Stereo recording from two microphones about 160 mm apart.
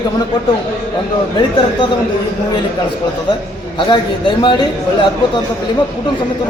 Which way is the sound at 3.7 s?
30° left (ahead or behind).